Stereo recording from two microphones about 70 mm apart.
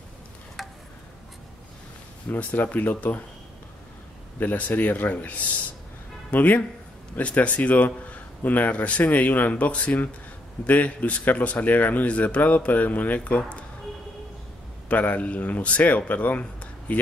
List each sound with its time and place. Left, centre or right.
0.6 s insect: centre
2.2 s speech: left
4.4 s speech: left
14.9 s speech: left